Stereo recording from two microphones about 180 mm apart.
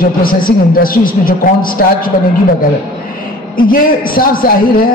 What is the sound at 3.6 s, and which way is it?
A woman's voice, 50° left (ahead or behind).